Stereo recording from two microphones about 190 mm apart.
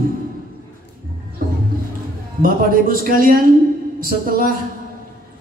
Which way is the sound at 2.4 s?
50° right (ahead or behind).